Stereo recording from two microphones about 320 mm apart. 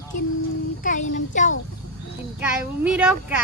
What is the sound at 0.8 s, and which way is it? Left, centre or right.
Speech, left.